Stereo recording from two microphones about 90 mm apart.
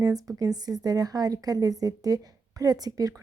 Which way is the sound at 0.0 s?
45° right (ahead or behind).